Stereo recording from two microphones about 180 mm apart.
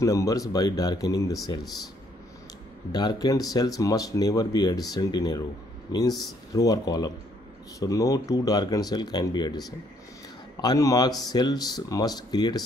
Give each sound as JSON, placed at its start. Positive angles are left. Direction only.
{"t": 0.0, "sound": "speech", "side_deg": 15}
{"t": 2.9, "sound": "speech", "side_deg": 20}